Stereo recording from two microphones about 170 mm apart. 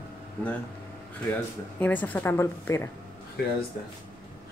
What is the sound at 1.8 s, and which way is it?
Speech, 10° left (ahead or behind).